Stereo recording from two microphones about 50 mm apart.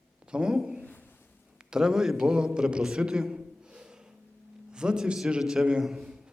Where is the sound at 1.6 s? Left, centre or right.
Centre.